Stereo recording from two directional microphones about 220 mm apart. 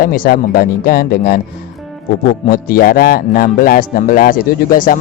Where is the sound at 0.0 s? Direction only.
40° left (ahead or behind).